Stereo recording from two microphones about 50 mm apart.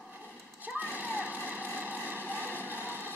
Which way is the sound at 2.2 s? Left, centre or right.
Left.